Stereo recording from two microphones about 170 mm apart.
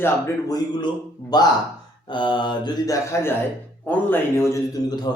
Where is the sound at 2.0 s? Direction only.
30° left (ahead or behind).